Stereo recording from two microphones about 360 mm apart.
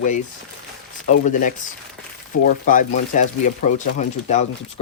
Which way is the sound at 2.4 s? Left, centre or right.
Left.